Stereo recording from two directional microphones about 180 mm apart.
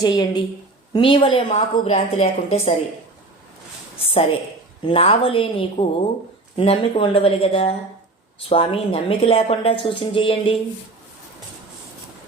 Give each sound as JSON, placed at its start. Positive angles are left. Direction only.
{"t": 0.0, "sound": "speech", "side_deg": 20}
{"t": 4.0, "sound": "speech", "side_deg": 35}